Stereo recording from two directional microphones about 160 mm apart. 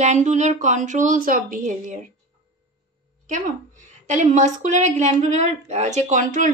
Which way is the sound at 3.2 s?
55° right (ahead or behind).